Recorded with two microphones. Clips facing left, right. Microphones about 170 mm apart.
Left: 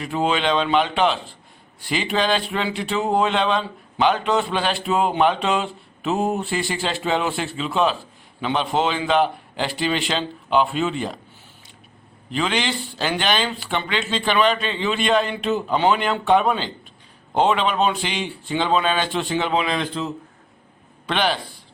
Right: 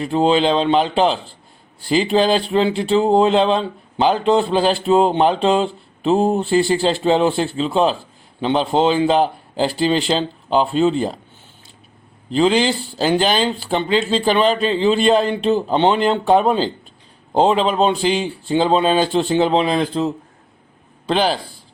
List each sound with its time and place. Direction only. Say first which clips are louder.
0.0 s speech: right 6 dB; 30° right (ahead or behind)
12.3 s speech: right 8 dB; 35° right (ahead or behind)
21.1 s speech: right 4 dB; 35° right (ahead or behind)